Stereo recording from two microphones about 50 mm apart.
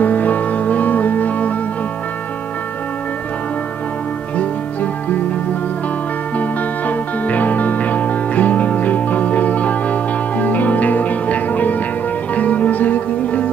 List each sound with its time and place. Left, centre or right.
0.0 s music: left
6.9 s music: left